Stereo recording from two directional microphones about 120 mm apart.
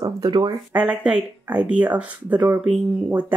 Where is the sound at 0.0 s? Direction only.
35° right (ahead or behind).